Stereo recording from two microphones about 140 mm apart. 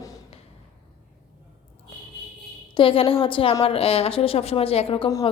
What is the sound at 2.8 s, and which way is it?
A woman's voice, 40° left (ahead or behind).